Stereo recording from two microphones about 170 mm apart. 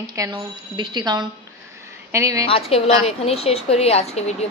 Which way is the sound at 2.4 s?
35° left (ahead or behind).